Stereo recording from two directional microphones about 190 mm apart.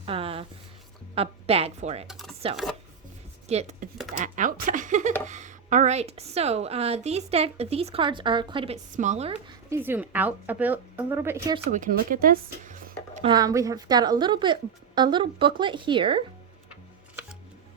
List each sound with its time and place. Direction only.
0.0 s a sound: 30° right (ahead or behind)
1.1 s speech: 30° right (ahead or behind)
2.0 s chopping: centre (ahead or behind)
3.5 s speech: 35° right (ahead or behind)
9.6 s a woman's voice: 10° right (ahead or behind)
11.7 s speech: 45° right (ahead or behind)
13.2 s a woman's voice: 20° right (ahead or behind)